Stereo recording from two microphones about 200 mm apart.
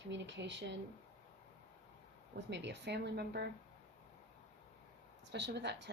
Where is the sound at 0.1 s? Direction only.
60° right (ahead or behind).